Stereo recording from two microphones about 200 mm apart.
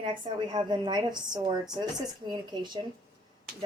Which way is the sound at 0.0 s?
20° right (ahead or behind).